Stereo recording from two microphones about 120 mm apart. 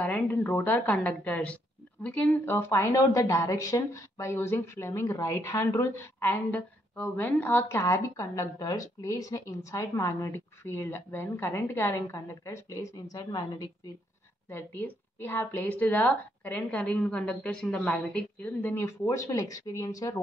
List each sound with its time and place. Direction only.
0.0 s a woman's voice: 15° left (ahead or behind); by 13.7 s 35° left (ahead or behind)
14.5 s a woman's voice: 15° left (ahead or behind)